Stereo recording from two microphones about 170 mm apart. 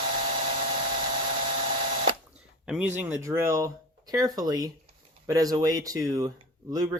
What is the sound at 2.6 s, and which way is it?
Speech, 10° right (ahead or behind).